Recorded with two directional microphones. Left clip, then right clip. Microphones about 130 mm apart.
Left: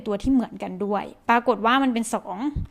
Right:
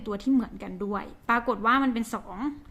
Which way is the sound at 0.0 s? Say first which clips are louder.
Left 4 dB; 45° left (ahead or behind).